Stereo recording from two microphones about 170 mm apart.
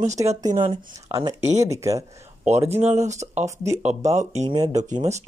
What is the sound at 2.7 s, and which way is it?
Speech, 40° right (ahead or behind).